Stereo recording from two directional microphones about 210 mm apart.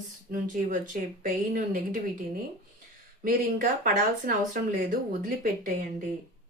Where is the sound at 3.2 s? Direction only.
40° right (ahead or behind).